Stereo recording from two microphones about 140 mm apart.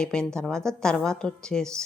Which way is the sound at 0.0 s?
5° left (ahead or behind).